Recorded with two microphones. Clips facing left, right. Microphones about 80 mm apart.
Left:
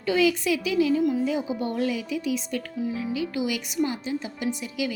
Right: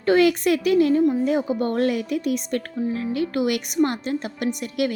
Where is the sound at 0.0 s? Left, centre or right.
Right.